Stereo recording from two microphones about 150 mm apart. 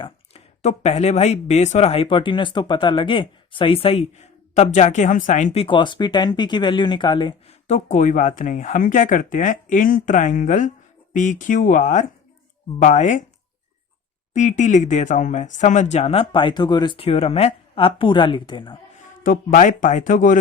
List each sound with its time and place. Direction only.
0.0 s speech: 45° left (ahead or behind)
5.6 s speech: 30° left (ahead or behind)
7.7 s speech: 55° left (ahead or behind)
14.3 s speech: 55° left (ahead or behind); by 18.8 s 30° left (ahead or behind)
19.2 s speech: 65° left (ahead or behind)